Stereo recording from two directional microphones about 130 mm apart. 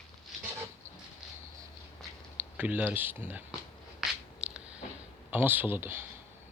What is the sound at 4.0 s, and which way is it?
Biting, 10° right (ahead or behind).